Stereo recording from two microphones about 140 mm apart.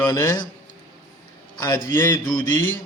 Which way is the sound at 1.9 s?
15° left (ahead or behind).